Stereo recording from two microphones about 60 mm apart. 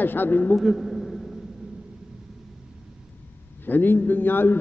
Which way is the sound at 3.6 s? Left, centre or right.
Left.